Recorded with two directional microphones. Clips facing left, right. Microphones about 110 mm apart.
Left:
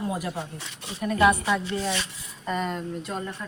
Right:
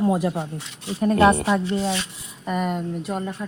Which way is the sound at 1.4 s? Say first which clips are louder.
Right 4 dB; 30° right (ahead or behind).